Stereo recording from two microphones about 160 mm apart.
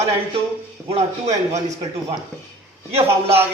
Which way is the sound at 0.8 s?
40° right (ahead or behind).